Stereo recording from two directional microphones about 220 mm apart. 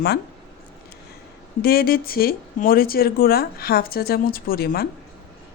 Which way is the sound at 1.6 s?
40° left (ahead or behind).